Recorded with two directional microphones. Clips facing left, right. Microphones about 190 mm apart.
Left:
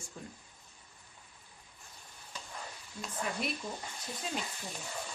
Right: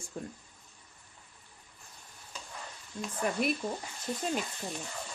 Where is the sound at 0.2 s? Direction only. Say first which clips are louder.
Right 7 dB; 50° right (ahead or behind).